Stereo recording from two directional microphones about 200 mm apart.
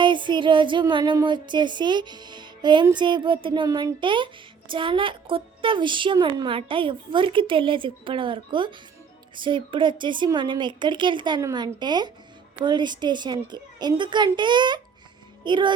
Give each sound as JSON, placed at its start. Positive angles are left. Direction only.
{"t": 0.0, "sound": "music", "side_deg": -25}
{"t": 1.1, "sound": "a woman's voice", "side_deg": -25}